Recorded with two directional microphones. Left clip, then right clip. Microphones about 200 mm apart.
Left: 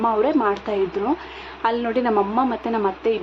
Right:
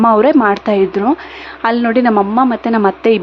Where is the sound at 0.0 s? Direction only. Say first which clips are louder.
Right 9 dB; 35° right (ahead or behind).